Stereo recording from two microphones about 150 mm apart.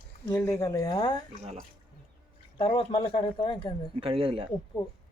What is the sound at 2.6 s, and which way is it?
Speech, 35° left (ahead or behind).